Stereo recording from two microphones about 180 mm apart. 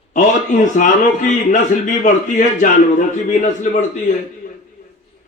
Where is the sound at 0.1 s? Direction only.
45° left (ahead or behind).